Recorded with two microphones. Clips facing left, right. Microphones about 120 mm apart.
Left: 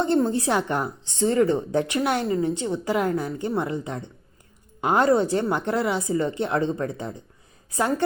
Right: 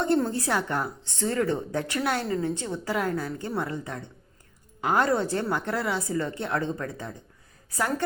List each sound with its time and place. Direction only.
0.0 s a woman's voice: 20° left (ahead or behind)